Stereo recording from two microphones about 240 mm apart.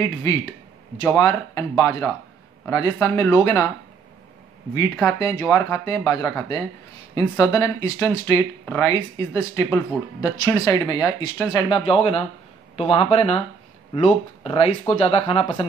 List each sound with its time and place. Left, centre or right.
0.0 s speech: centre
4.7 s speech: centre